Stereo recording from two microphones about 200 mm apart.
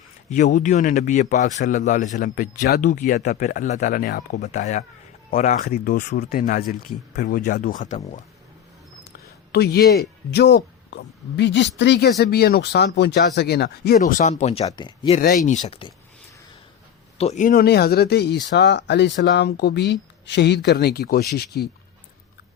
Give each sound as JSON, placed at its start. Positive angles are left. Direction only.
{"t": 0.4, "sound": "speech", "side_deg": 40}
{"t": 4.4, "sound": "speech", "side_deg": 40}
{"t": 9.0, "sound": "speech", "side_deg": 50}
{"t": 14.0, "sound": "speech", "side_deg": 40}
{"t": 14.7, "sound": "speech", "side_deg": 20}
{"t": 15.2, "sound": "speech", "side_deg": 40}
{"t": 15.6, "sound": "speech", "side_deg": 25}
{"t": 17.2, "sound": "speech", "side_deg": 35}